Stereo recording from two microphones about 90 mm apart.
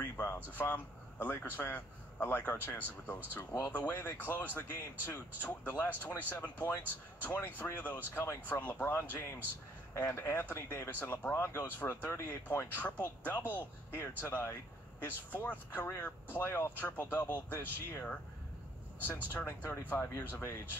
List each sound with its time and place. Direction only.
0.0 s a sound: 30° left (ahead or behind)
0.6 s speech: 20° left (ahead or behind)
3.7 s speech: 20° left (ahead or behind)